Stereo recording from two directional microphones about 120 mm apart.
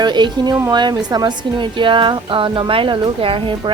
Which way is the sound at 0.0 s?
35° right (ahead or behind).